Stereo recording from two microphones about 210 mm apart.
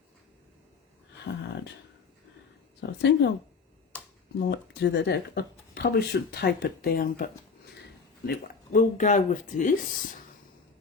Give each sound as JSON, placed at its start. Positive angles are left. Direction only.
{"t": 1.3, "sound": "speech", "side_deg": 50}
{"t": 2.8, "sound": "speech", "side_deg": 55}
{"t": 4.4, "sound": "speech", "side_deg": 55}
{"t": 8.3, "sound": "speech", "side_deg": 40}